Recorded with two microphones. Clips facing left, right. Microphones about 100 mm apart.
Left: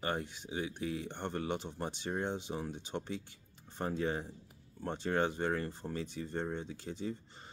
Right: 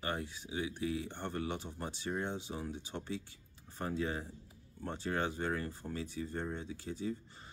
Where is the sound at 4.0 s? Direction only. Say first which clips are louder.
Left 2 dB; 25° left (ahead or behind).